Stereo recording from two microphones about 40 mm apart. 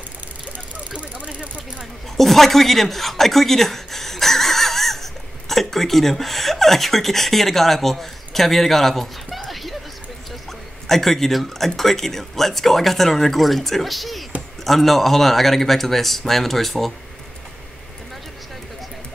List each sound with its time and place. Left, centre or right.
0.5 s vehicle: right
2.1 s speech: centre
10.9 s speech: centre